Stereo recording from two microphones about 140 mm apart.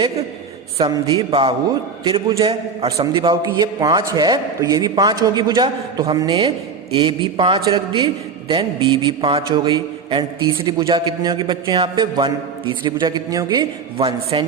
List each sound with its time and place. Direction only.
0.8 s a man's voice: 30° right (ahead or behind)
6.9 s a man's voice: 35° right (ahead or behind)